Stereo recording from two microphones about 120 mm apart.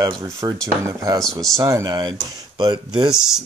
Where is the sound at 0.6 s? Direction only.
25° right (ahead or behind).